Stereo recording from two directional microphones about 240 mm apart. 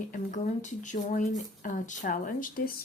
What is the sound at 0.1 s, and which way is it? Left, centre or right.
Speech, left.